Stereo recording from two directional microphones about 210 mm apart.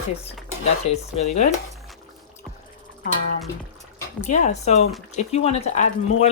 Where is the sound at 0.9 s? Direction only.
30° left (ahead or behind).